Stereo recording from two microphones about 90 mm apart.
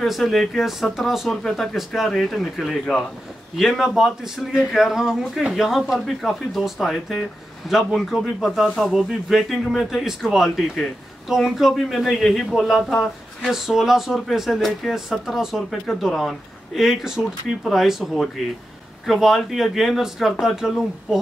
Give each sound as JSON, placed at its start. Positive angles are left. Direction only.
{"t": 0.0, "sound": "speech", "side_deg": 0}